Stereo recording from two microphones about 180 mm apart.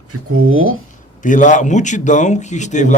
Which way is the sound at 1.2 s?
45° left (ahead or behind).